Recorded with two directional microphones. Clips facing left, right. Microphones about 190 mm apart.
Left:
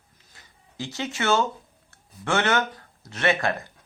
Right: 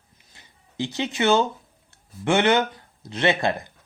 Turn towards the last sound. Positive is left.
turn(degrees=-20)  # may be behind; listen again after turning